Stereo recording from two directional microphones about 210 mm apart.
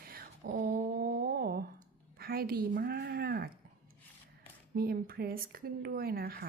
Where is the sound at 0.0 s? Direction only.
45° right (ahead or behind).